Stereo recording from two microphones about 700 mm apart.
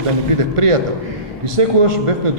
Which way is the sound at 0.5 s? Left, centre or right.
Right.